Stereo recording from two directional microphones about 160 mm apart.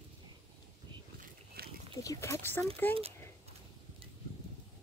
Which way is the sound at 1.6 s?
75° right (ahead or behind).